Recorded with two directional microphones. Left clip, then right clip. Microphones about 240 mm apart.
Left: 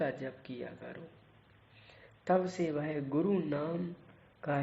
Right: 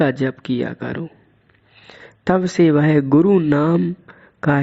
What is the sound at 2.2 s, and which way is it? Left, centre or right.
Speech, right.